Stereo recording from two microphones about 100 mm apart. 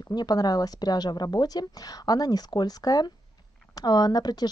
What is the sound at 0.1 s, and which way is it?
Speech, 45° left (ahead or behind).